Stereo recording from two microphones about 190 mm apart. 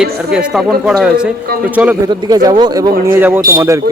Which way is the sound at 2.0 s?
20° right (ahead or behind).